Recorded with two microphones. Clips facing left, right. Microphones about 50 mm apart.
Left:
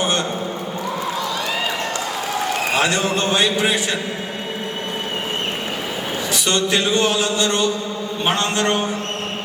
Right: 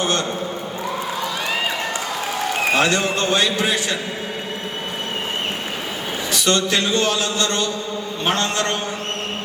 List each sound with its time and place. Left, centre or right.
0.0 s a sound: left
2.8 s speech: centre
6.4 s speech: centre